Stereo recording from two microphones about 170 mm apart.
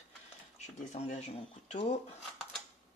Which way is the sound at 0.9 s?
40° left (ahead or behind).